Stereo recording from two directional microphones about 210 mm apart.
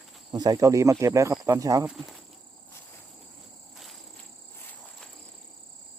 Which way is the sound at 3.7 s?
Centre (ahead or behind).